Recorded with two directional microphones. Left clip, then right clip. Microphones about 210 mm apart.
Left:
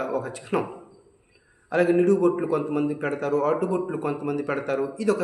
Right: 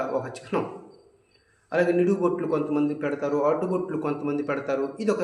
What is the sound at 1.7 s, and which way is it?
A man's voice, 15° left (ahead or behind).